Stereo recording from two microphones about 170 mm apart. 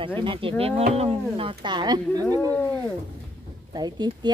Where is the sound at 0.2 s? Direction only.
30° right (ahead or behind).